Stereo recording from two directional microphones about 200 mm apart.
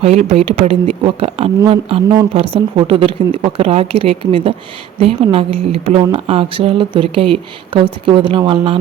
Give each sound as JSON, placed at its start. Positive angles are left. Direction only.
{"t": 0.0, "sound": "speech", "side_deg": -30}